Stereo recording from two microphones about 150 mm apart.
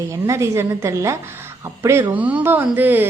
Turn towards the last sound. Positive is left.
turn(degrees=-10)  # may be behind; listen again after turning